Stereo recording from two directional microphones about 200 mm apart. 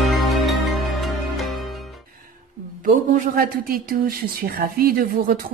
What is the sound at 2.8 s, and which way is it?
Speech, 45° right (ahead or behind).